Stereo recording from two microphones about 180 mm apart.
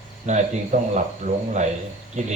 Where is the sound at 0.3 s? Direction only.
40° right (ahead or behind).